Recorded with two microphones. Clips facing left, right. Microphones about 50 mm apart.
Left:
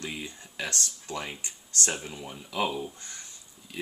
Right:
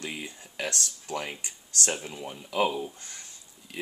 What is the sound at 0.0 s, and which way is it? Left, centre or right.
Speech, centre.